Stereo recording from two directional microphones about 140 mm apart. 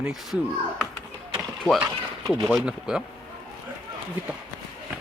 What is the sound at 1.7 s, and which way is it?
Speech, 5° left (ahead or behind).